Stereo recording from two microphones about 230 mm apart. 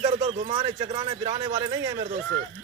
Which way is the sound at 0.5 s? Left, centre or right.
Centre.